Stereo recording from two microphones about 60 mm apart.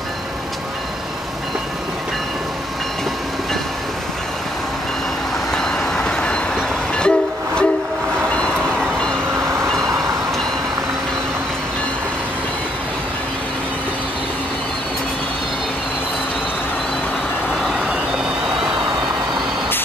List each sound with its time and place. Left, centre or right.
5.5 s train: centre